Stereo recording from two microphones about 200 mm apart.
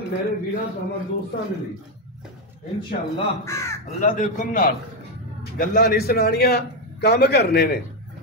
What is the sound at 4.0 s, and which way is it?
A man's voice, 40° left (ahead or behind).